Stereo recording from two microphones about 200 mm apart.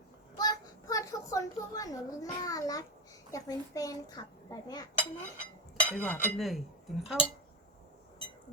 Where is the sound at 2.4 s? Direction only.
15° left (ahead or behind).